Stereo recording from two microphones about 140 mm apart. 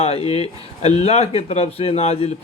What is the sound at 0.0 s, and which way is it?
Speech, 45° left (ahead or behind).